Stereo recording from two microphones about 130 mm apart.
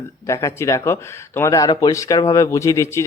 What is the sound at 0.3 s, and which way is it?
Speech, 25° left (ahead or behind).